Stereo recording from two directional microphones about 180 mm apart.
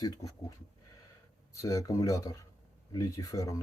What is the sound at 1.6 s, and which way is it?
Speech, 20° left (ahead or behind).